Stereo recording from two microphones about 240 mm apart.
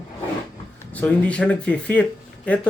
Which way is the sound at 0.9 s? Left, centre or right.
Centre.